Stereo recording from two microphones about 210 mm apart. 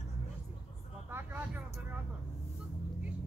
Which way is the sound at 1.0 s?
10° right (ahead or behind).